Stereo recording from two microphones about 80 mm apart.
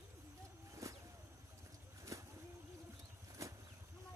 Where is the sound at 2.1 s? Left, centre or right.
Right.